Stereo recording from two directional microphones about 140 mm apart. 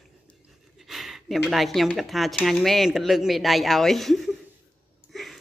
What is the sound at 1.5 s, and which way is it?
Speech, centre (ahead or behind).